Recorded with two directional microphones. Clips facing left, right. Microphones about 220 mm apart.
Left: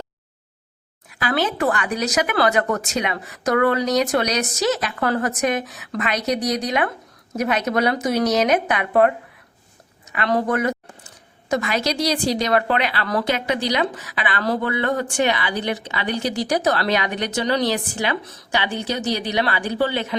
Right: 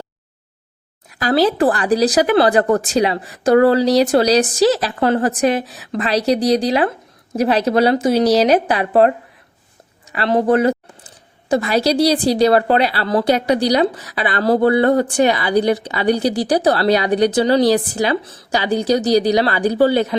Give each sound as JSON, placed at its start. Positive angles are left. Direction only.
{"t": 1.1, "sound": "a woman's voice", "side_deg": -35}